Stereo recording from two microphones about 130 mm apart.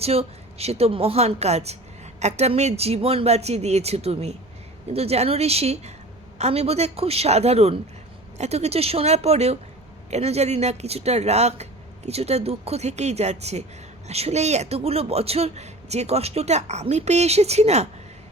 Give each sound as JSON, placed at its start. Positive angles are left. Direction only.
{"t": 0.0, "sound": "speech", "side_deg": -50}